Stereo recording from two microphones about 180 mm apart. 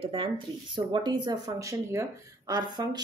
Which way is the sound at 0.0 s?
30° right (ahead or behind).